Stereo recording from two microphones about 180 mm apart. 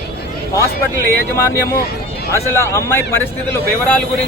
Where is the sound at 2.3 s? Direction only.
15° left (ahead or behind).